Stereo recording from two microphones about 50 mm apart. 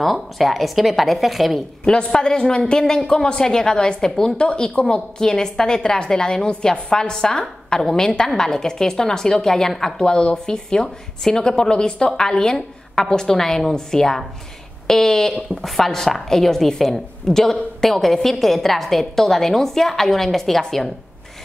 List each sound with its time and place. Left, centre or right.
0.0 s speech: centre
1.9 s a woman's voice: centre